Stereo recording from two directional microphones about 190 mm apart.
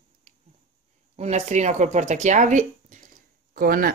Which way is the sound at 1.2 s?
35° right (ahead or behind).